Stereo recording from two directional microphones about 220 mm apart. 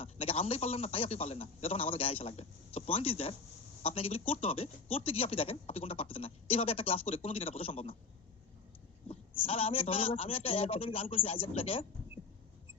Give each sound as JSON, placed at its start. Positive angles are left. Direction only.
{"t": 0.0, "sound": "a man's voice", "side_deg": 25}
{"t": 9.0, "sound": "speech", "side_deg": 25}